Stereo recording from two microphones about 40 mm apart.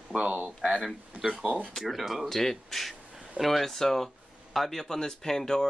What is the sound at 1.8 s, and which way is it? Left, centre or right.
Speech, centre.